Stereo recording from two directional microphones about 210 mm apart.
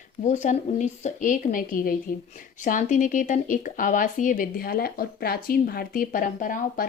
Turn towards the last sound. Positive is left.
turn(degrees=40)  # may be behind; listen again after turning